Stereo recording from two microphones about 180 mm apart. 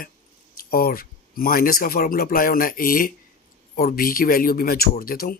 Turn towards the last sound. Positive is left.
turn(degrees=55)  # may be behind; listen again after turning